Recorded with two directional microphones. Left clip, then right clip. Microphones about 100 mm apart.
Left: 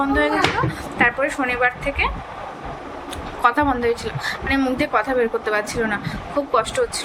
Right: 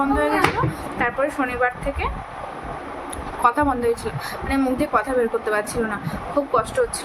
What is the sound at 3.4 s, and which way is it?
A woman's voice, 15° right (ahead or behind).